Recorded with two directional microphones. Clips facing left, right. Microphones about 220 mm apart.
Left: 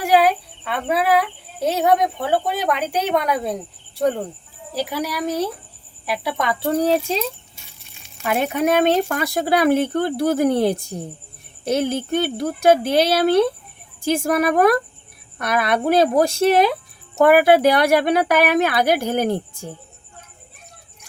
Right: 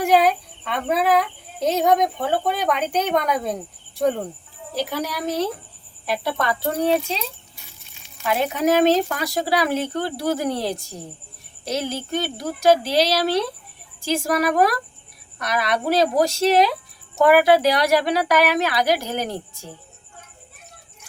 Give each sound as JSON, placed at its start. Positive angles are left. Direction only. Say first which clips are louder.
{"t": 0.0, "sound": "a woman's voice", "louder": "left 1 dB", "side_deg": 5}
{"t": 4.7, "sound": "a woman's voice", "louder": "left 1 dB", "side_deg": 10}
{"t": 6.6, "sound": "speech", "louder": "left 4 dB", "side_deg": 40}
{"t": 8.3, "sound": "a woman's voice", "louder": "left 1 dB", "side_deg": 55}